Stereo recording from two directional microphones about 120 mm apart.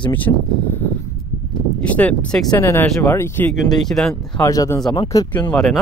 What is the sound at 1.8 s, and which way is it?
Speech, 10° left (ahead or behind).